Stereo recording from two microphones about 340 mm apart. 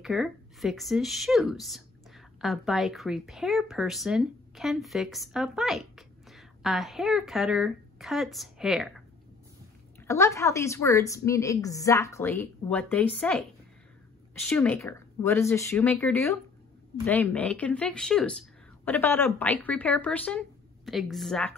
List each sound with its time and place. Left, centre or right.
0.0 s a woman's voice: centre